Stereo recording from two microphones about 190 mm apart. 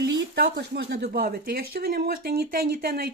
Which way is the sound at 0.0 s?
65° right (ahead or behind).